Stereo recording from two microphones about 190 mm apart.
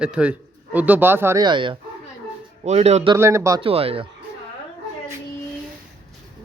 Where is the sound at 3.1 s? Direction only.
15° right (ahead or behind).